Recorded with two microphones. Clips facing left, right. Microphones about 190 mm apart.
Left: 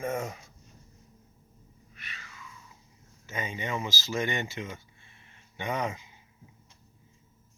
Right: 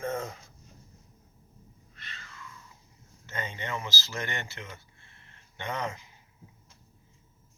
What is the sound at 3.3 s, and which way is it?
Speech, 15° left (ahead or behind).